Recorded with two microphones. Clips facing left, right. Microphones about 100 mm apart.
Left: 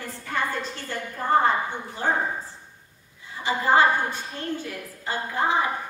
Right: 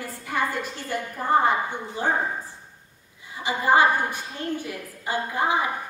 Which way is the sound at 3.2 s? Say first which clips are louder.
Even; 15° right (ahead or behind).